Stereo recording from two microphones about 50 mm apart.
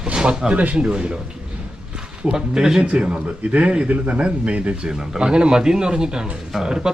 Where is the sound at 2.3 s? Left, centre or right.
Centre.